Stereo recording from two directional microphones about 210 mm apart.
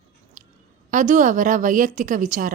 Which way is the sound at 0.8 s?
40° right (ahead or behind).